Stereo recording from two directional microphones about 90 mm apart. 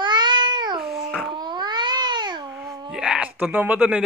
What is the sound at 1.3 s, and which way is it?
Babbling, 55° right (ahead or behind).